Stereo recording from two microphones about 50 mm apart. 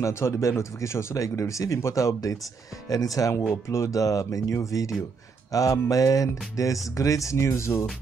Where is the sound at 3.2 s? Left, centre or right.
Left.